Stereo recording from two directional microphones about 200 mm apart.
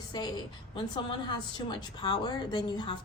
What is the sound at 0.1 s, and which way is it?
A woman's voice, 20° left (ahead or behind).